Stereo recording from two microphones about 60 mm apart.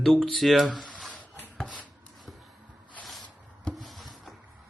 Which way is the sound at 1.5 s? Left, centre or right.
Centre.